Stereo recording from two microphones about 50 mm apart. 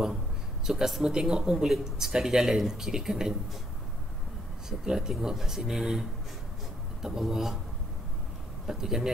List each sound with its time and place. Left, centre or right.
0.7 s speech: centre
4.6 s speech: centre
8.6 s speech: centre